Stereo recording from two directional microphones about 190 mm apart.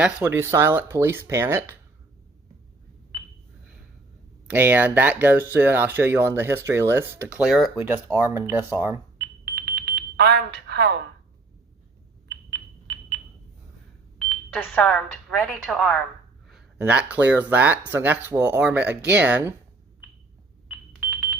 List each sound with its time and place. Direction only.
0.0 s speech: 10° right (ahead or behind)
4.4 s speech: 10° right (ahead or behind)
8.0 s speech: 15° right (ahead or behind)
9.1 s smoke detector: 60° right (ahead or behind)
12.3 s sonar: 60° right (ahead or behind)
14.5 s speech: 5° left (ahead or behind)